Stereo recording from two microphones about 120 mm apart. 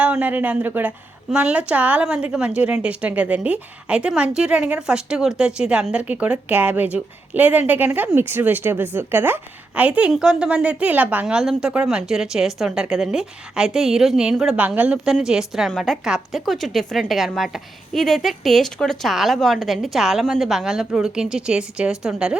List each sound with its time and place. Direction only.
0.0 s a woman's voice: 15° right (ahead or behind)